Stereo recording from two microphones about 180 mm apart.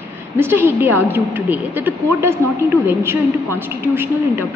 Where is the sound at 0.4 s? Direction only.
10° right (ahead or behind).